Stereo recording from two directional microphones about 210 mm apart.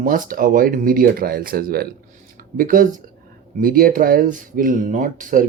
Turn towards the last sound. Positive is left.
turn(degrees=-40)  # may be behind; listen again after turning